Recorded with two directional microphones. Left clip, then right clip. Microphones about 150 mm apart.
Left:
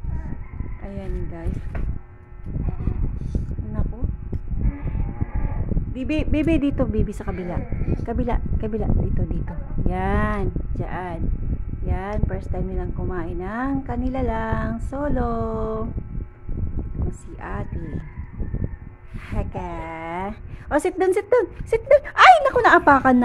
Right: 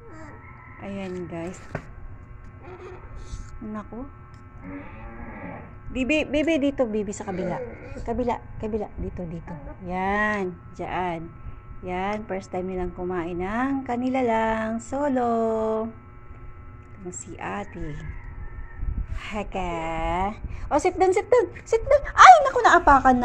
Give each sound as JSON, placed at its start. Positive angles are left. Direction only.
{"t": 0.8, "sound": "a woman's voice", "side_deg": 0}
{"t": 5.9, "sound": "speech", "side_deg": 10}
{"t": 6.3, "sound": "a woman's voice", "side_deg": 25}
{"t": 17.4, "sound": "speech", "side_deg": 10}
{"t": 19.2, "sound": "a woman's voice", "side_deg": 0}
{"t": 20.7, "sound": "a woman's voice", "side_deg": 30}
{"t": 21.8, "sound": "speech", "side_deg": 45}